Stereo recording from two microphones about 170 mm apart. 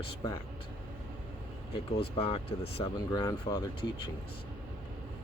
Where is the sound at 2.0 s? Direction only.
35° left (ahead or behind).